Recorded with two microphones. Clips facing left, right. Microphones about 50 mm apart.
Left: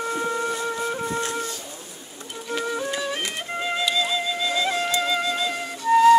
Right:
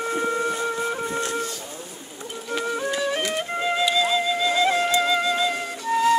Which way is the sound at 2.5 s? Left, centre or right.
Centre.